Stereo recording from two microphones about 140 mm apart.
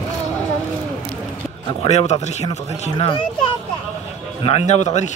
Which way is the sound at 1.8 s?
45° left (ahead or behind).